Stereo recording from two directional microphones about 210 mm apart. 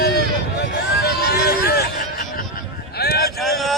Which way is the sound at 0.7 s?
50° left (ahead or behind).